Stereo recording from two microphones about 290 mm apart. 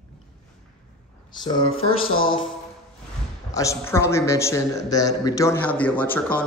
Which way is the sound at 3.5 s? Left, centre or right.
Centre.